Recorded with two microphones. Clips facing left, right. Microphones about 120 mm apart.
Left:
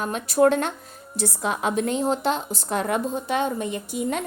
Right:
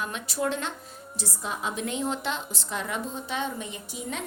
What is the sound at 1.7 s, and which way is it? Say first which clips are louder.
A woman's voice: left 7 dB; 40° left (ahead or behind).